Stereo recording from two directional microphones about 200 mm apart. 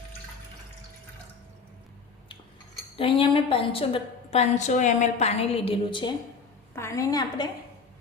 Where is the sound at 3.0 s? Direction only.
25° left (ahead or behind).